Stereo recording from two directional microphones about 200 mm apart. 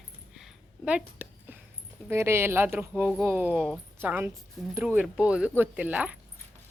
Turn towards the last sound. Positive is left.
turn(degrees=-5)  # may be behind; listen again after turning